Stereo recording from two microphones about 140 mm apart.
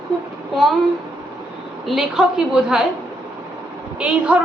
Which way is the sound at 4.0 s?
10° right (ahead or behind).